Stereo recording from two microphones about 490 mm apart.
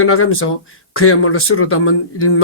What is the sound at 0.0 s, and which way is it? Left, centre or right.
Speech, left.